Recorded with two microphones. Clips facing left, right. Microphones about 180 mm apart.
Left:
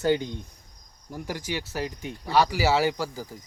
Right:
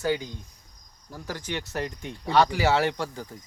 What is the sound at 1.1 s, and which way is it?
Speech, 15° left (ahead or behind).